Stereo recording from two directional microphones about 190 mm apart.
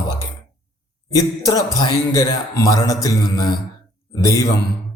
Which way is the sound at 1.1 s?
20° left (ahead or behind).